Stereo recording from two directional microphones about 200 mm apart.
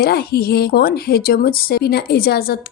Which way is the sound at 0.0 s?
50° left (ahead or behind).